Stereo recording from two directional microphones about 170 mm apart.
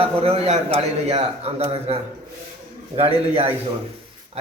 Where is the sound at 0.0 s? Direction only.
35° right (ahead or behind).